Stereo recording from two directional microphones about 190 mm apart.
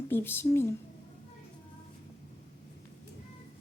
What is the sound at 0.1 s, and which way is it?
Speech, 10° left (ahead or behind).